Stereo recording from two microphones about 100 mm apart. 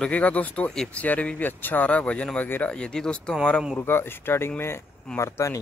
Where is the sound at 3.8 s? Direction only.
25° left (ahead or behind).